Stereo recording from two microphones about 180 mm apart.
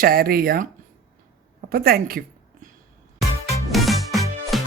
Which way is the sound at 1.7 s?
55° right (ahead or behind).